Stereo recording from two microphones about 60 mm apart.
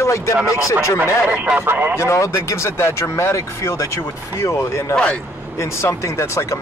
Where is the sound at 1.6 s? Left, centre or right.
Right.